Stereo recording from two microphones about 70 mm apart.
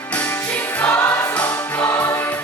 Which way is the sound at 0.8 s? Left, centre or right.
Left.